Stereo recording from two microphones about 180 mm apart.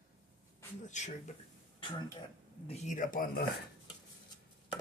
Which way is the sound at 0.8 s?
40° left (ahead or behind).